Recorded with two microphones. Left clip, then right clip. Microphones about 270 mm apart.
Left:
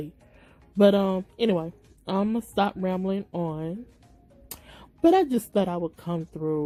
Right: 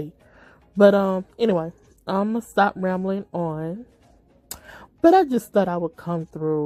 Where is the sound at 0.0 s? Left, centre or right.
Centre.